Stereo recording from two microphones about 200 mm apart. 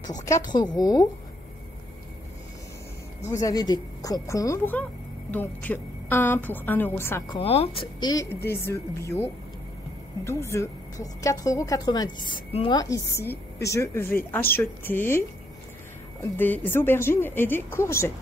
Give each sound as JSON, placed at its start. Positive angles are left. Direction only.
{"t": 0.0, "sound": "a woman's voice", "side_deg": 15}
{"t": 3.3, "sound": "a woman's voice", "side_deg": 20}
{"t": 7.3, "sound": "a woman's voice", "side_deg": 30}